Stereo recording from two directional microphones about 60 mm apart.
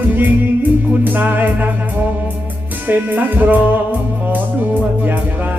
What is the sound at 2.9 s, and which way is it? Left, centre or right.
Music, right.